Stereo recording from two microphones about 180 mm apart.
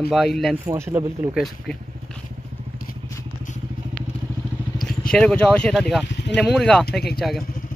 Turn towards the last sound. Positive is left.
turn(degrees=0)  # may be behind; listen again after turning